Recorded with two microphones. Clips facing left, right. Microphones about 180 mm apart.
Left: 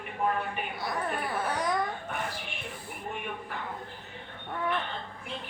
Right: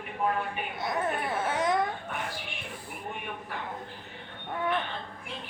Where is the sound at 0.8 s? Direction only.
20° right (ahead or behind).